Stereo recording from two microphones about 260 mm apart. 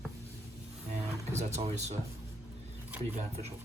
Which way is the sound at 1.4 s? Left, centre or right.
Right.